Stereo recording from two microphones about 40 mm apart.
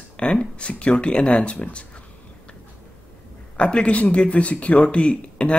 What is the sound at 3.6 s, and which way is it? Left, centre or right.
Speech, left.